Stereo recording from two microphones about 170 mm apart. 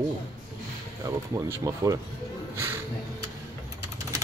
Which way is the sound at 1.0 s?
20° right (ahead or behind).